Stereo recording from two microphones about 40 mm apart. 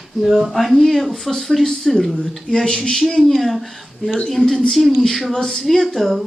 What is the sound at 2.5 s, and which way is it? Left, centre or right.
Speech, centre.